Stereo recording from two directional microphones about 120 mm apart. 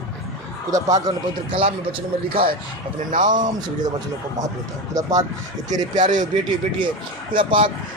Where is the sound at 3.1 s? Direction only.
90° right.